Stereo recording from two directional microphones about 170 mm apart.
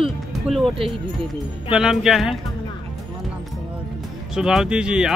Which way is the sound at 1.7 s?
Centre (ahead or behind).